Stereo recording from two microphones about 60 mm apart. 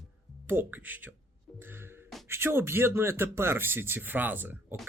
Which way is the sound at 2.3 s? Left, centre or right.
Right.